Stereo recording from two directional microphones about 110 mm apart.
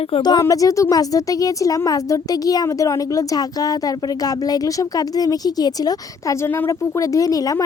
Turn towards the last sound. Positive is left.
turn(degrees=35)  # may be behind; listen again after turning